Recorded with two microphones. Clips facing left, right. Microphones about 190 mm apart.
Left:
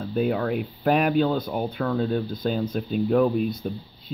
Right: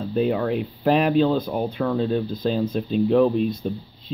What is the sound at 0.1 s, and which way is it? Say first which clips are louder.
Speech: right 2 dB; centre (ahead or behind).